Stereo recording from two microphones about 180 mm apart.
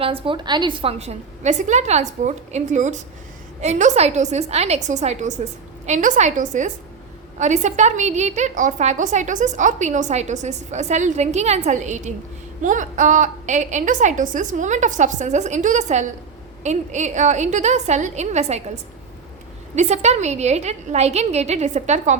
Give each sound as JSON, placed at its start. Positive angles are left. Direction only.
{"t": 0.0, "sound": "a woman's voice", "side_deg": -30}